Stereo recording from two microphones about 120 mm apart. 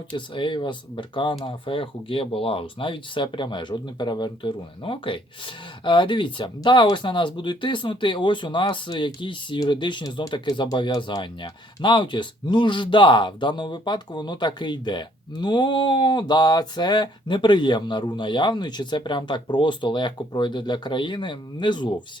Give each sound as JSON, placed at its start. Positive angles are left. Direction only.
{"t": 0.3, "sound": "speech", "side_deg": 40}